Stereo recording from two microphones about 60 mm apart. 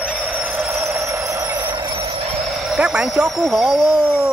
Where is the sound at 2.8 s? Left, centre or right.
Centre.